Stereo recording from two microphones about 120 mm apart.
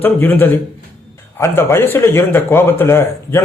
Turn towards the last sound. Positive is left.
turn(degrees=20)  # may be behind; listen again after turning